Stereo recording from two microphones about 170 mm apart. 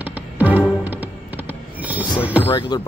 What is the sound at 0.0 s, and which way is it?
Music, 10° right (ahead or behind).